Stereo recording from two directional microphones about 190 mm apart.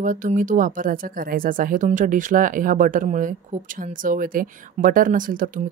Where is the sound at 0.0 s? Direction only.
45° right (ahead or behind).